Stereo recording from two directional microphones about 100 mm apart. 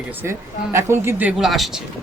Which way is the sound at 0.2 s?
25° right (ahead or behind).